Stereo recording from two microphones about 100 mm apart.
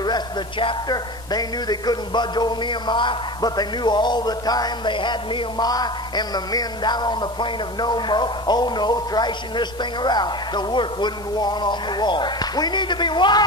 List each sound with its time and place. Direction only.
0.0 s speech: 50° left (ahead or behind)